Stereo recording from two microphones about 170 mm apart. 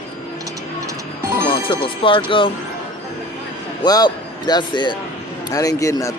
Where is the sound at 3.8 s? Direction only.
25° left (ahead or behind).